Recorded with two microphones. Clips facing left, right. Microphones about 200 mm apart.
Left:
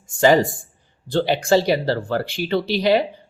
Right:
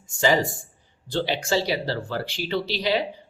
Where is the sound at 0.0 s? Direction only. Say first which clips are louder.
Left 6 dB; 50° left (ahead or behind).